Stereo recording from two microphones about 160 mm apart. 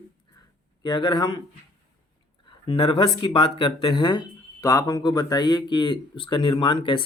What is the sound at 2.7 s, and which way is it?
Speech, 35° left (ahead or behind).